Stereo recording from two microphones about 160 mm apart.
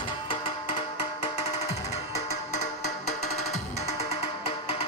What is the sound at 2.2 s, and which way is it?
Music, 45° left (ahead or behind).